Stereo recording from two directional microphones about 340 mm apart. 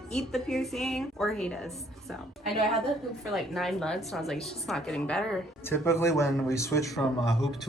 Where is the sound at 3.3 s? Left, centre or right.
Centre.